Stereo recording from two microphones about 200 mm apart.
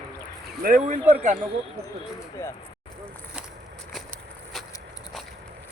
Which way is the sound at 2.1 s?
15° left (ahead or behind).